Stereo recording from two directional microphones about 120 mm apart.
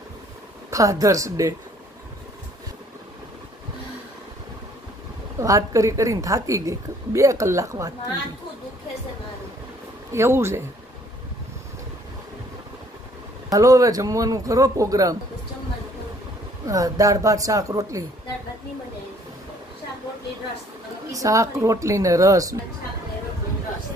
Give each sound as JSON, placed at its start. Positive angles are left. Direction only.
{"t": 0.7, "sound": "a woman's voice", "side_deg": -25}
{"t": 5.4, "sound": "a woman's voice", "side_deg": -30}
{"t": 10.1, "sound": "a woman's voice", "side_deg": -20}
{"t": 13.5, "sound": "a woman's voice", "side_deg": -30}
{"t": 16.6, "sound": "a woman's voice", "side_deg": -30}
{"t": 21.1, "sound": "a woman's voice", "side_deg": -30}